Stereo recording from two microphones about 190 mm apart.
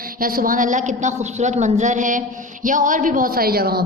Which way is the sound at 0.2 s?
50° right (ahead or behind).